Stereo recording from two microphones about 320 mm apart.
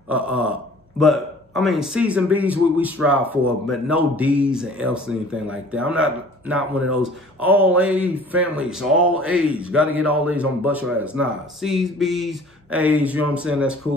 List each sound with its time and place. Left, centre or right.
0.1 s a man's voice: centre